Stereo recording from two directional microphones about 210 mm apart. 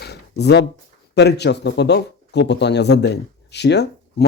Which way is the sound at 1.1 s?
55° left (ahead or behind).